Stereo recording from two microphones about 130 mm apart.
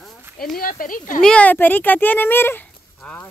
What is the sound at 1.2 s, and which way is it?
Speech, 10° left (ahead or behind).